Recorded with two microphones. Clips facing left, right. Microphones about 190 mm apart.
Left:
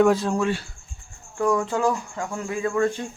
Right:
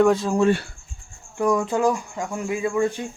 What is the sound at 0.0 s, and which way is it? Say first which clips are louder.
Speech: right 1 dB; centre (ahead or behind).